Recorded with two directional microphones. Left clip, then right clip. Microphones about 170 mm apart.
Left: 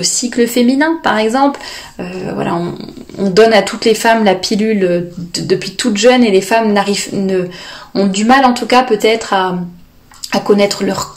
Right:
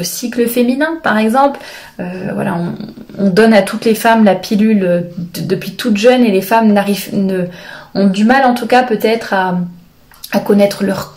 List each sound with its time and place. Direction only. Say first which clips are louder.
0.0 s speech: left 2 dB; 30° left (ahead or behind)